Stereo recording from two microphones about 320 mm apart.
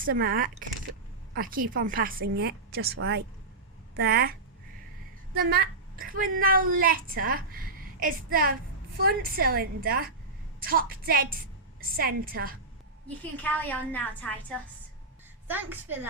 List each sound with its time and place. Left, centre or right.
0.0 s a child's voice: right
13.3 s a woman's voice: centre
15.4 s a woman's voice: centre